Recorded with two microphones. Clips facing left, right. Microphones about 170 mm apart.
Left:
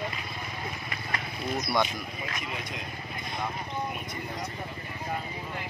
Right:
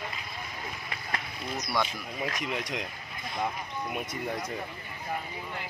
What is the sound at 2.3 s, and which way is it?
Speech, 90° right.